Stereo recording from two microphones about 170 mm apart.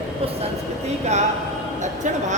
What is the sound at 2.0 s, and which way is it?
Speech, 45° right (ahead or behind).